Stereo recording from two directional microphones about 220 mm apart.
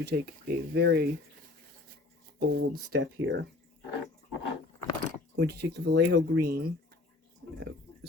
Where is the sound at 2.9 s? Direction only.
50° right (ahead or behind).